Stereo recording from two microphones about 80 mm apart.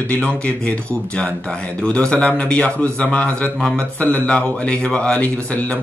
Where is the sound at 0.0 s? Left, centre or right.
Centre.